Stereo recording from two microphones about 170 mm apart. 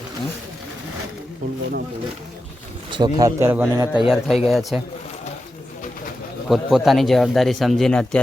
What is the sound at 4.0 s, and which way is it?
Speech, centre (ahead or behind).